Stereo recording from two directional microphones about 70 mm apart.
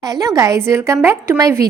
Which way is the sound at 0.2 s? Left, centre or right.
Right.